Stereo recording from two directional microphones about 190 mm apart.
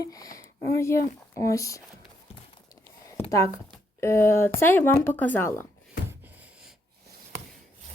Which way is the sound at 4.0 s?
15° left (ahead or behind).